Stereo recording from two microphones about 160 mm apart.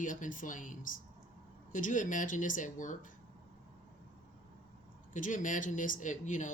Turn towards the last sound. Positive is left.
turn(degrees=50)  # may be behind; listen again after turning